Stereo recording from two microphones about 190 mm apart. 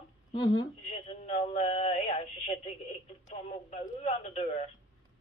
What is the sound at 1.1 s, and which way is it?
Synthetic singing, 35° left (ahead or behind).